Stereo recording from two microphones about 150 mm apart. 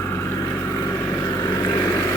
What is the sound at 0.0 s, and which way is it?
Vehicle, 20° left (ahead or behind).